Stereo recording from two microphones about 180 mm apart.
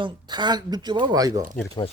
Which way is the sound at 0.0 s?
25° right (ahead or behind).